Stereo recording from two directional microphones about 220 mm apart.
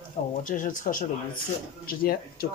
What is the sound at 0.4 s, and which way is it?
Speech, 35° left (ahead or behind).